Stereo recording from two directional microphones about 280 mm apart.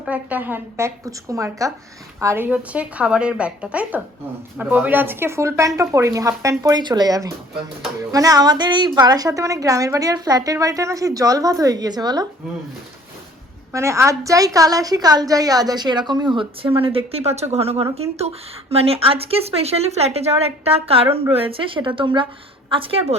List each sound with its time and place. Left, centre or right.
0.0 s a woman's voice: centre
13.7 s a woman's voice: centre